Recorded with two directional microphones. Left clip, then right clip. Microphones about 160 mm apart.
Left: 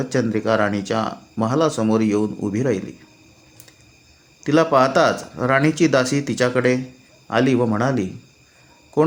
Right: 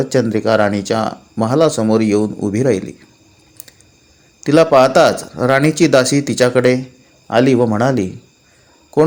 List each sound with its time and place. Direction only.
0.0 s speech: 25° right (ahead or behind)
4.4 s speech: 25° right (ahead or behind)